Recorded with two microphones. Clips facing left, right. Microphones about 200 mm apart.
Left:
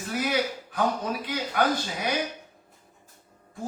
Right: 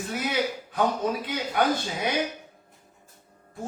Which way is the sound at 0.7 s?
25° right (ahead or behind).